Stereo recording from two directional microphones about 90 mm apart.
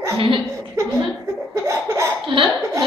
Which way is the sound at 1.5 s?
35° right (ahead or behind).